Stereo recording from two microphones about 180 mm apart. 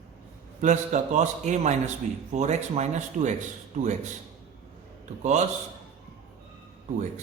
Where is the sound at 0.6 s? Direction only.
40° right (ahead or behind).